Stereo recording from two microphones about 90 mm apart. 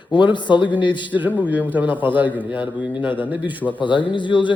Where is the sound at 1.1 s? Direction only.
20° right (ahead or behind).